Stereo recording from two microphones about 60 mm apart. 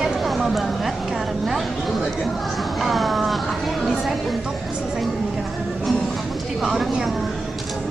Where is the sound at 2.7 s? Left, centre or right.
Centre.